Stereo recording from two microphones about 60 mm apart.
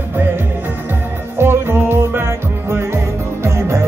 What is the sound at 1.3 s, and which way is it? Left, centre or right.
Music, right.